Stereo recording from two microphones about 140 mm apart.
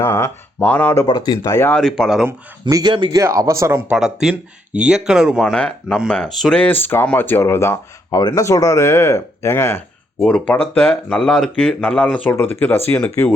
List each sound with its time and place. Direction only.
0.0 s speech: 15° left (ahead or behind)
1.0 s speech: 30° left (ahead or behind)
1.7 s speech: 5° left (ahead or behind)
2.2 s speech: 25° right (ahead or behind)
3.2 s a man's voice: 20° right (ahead or behind)
3.8 s speech: 5° right (ahead or behind); by 9.8 s 20° left (ahead or behind)
10.2 s speech: 5° left (ahead or behind)